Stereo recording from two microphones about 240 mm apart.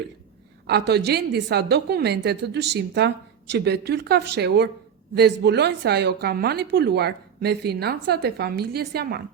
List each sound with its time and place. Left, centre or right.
0.7 s a woman's voice: right